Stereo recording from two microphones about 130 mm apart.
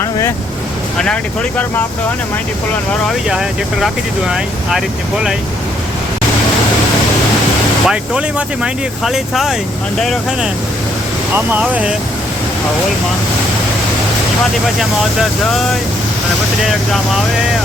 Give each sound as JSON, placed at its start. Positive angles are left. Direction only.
{"t": 0.0, "sound": "vehicle", "side_deg": 20}
{"t": 0.9, "sound": "speech", "side_deg": 5}
{"t": 3.2, "sound": "speech", "side_deg": -5}
{"t": 7.9, "sound": "speech", "side_deg": -5}
{"t": 11.3, "sound": "speech", "side_deg": -10}
{"t": 14.8, "sound": "speech", "side_deg": 0}